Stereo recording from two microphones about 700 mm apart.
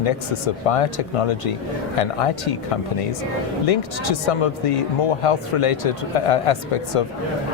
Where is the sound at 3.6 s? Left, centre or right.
Left.